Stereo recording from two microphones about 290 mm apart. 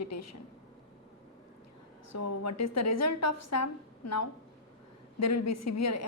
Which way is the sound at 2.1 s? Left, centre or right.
Left.